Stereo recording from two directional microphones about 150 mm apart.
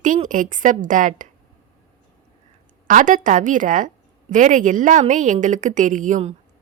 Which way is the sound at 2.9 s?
60° right (ahead or behind).